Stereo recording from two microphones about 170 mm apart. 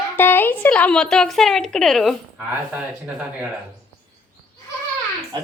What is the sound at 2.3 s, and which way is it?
Speech, 10° right (ahead or behind).